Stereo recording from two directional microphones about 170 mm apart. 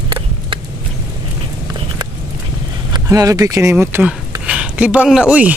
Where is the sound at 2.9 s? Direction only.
20° right (ahead or behind).